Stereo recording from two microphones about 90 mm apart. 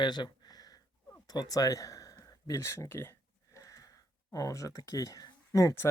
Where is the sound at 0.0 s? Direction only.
55° left (ahead or behind).